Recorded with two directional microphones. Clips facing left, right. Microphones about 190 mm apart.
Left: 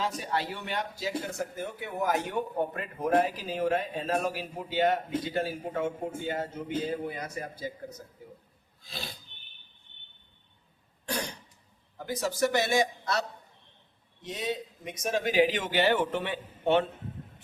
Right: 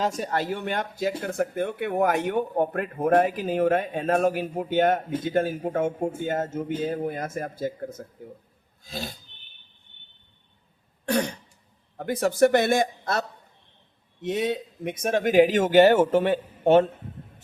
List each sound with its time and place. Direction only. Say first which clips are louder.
0.0 s speech: right 5 dB; 50° right (ahead or behind)
11.0 s throat clearing: right 10 dB; 60° right (ahead or behind)
11.9 s speech: right 8 dB; 60° right (ahead or behind)
14.2 s speech: right 8 dB; 65° right (ahead or behind); by 16.9 s 40° right (ahead or behind)